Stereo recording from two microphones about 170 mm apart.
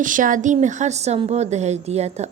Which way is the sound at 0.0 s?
50° right (ahead or behind).